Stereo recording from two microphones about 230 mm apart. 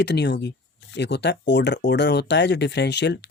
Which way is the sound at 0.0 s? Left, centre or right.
Left.